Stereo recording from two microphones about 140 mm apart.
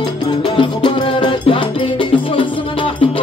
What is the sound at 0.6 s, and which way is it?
Music, 35° left (ahead or behind).